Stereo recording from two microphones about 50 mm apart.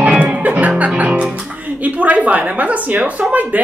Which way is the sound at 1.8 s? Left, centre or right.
Right.